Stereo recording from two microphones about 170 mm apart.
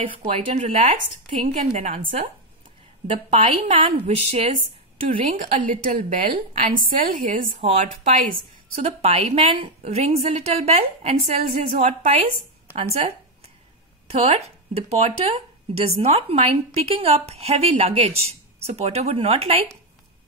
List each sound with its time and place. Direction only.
0.3 s a woman's voice: 40° right (ahead or behind)
3.3 s speech: 35° right (ahead or behind)
5.0 s a woman's voice: 50° right (ahead or behind)
7.6 s speech: 45° right (ahead or behind)
14.0 s speech: 40° right (ahead or behind)